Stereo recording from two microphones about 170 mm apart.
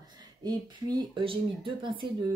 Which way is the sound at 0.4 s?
25° right (ahead or behind).